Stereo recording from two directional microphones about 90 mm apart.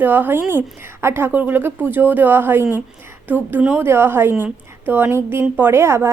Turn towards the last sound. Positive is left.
turn(degrees=-30)  # may be behind; listen again after turning